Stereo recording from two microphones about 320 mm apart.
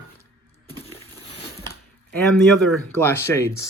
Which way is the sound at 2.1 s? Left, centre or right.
Centre.